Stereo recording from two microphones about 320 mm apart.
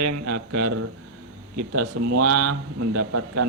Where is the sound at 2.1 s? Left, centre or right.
Right.